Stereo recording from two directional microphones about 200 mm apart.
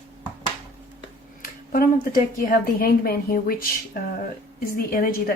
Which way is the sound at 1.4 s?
45° left (ahead or behind).